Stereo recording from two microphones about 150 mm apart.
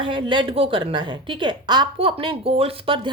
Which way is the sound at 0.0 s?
35° right (ahead or behind).